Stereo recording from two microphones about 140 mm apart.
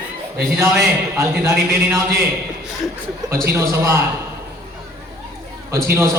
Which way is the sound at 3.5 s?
20° right (ahead or behind).